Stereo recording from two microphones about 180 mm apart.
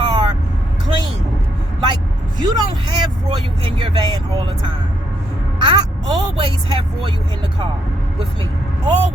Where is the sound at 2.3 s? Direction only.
20° right (ahead or behind).